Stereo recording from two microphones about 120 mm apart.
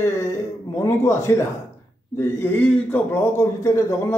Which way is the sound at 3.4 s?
25° left (ahead or behind).